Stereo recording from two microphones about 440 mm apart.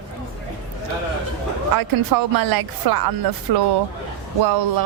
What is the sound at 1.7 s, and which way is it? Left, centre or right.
A woman's voice, right.